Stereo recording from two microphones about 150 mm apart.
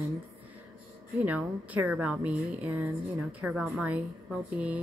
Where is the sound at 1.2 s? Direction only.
10° right (ahead or behind).